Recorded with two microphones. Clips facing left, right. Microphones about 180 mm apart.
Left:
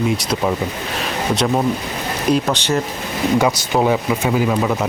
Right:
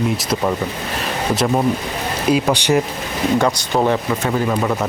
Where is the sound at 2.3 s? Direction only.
10° right (ahead or behind).